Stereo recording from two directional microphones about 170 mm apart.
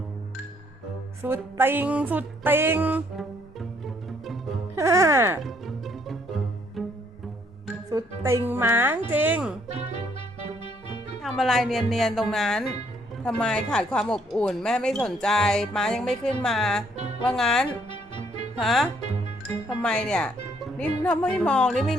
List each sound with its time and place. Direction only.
1.2 s music: 15° right (ahead or behind)
3.2 s bowed string instrument: centre (ahead or behind)
4.7 s music: 15° right (ahead or behind)
5.4 s music: centre (ahead or behind)
6.8 s cello: centre (ahead or behind)
7.9 s music: 20° right (ahead or behind)
10.6 s music: 30° left (ahead or behind)
11.2 s speech: centre (ahead or behind)
17.9 s music: 30° left (ahead or behind)
18.6 s speech: centre (ahead or behind)